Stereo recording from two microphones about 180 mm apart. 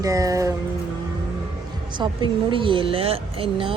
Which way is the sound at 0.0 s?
20° right (ahead or behind).